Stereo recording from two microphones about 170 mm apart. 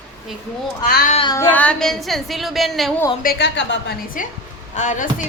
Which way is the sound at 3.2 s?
70° left (ahead or behind).